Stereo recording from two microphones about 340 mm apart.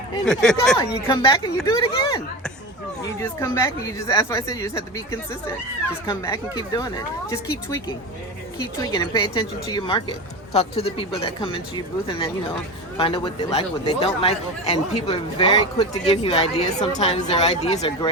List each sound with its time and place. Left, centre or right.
0.3 s speech: centre
8.5 s speech: centre
13.0 s speech: centre